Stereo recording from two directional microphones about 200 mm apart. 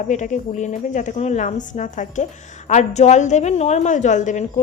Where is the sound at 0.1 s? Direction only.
35° left (ahead or behind).